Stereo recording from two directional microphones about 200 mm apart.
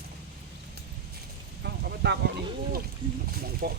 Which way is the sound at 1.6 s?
55° right (ahead or behind).